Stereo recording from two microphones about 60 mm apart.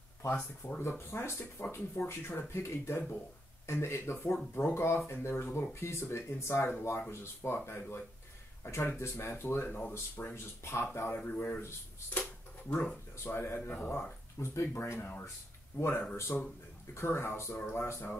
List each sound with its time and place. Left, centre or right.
0.3 s speech: left
0.8 s speech: left
9.7 s speech: left
10.3 s a man's voice: left
12.1 s a sound: left
13.2 s speech: left
14.4 s speech: left
15.7 s a man's voice: left
16.9 s speech: left